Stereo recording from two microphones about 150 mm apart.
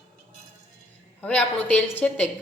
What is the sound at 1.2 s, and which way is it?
A woman's voice, 10° left (ahead or behind).